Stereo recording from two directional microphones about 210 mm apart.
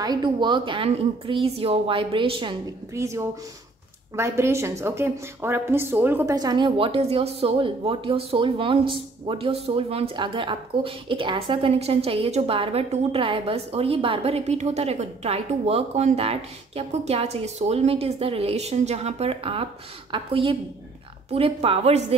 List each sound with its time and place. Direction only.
0.0 s a woman's voice: 20° right (ahead or behind)
2.9 s a woman's voice: 15° right (ahead or behind); by 22.0 s 30° right (ahead or behind)